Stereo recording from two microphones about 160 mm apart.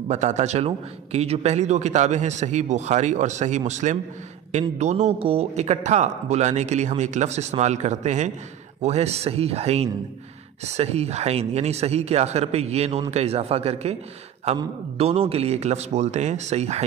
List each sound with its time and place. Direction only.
0.1 s a man's voice: 45° right (ahead or behind)
15.0 s a man's voice: 40° right (ahead or behind)